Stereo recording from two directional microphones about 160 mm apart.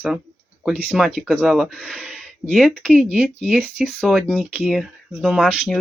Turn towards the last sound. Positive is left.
turn(degrees=0)  # may be behind; listen again after turning